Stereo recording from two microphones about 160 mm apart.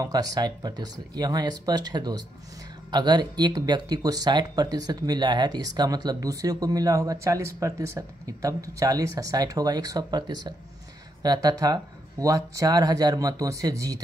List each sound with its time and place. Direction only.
0.0 s speech: 25° right (ahead or behind)